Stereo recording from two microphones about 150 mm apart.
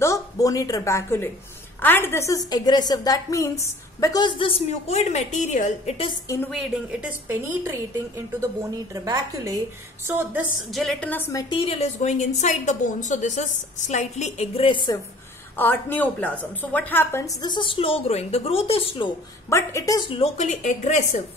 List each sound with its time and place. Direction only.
0.0 s a woman's voice: 20° left (ahead or behind); by 5.9 s 55° left (ahead or behind)
6.2 s a woman's voice: 20° left (ahead or behind)
6.5 s a woman's voice: 5° right (ahead or behind)
8.4 s a woman's voice: 25° right (ahead or behind)
10.7 s a woman's voice: centre (ahead or behind)
11.1 s a woman's voice: 15° left (ahead or behind)
11.4 s a woman's voice: 35° left (ahead or behind)
15.5 s a woman's voice: 15° left (ahead or behind)
17.4 s a woman's voice: 30° left (ahead or behind)
19.5 s a woman's voice: 20° left (ahead or behind)
20.1 s a woman's voice: 40° left (ahead or behind)
20.4 s a woman's voice: 55° left (ahead or behind)